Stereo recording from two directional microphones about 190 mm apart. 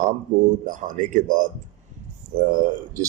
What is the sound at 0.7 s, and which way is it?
Speech, 40° right (ahead or behind).